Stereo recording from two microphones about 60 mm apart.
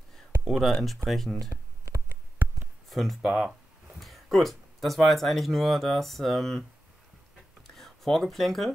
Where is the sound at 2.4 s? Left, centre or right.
Right.